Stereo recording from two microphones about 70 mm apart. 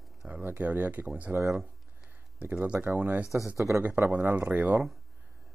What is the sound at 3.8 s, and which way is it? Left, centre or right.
Speech, right.